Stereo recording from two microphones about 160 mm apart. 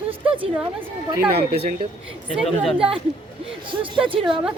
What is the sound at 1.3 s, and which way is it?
Speech, 85° right.